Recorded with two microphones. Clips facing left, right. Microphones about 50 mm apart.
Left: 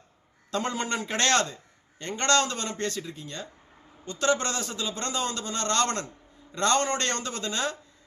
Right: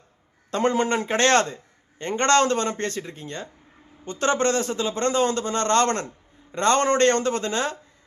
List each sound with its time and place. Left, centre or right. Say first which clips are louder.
0.5 s a man's voice: right 7 dB; right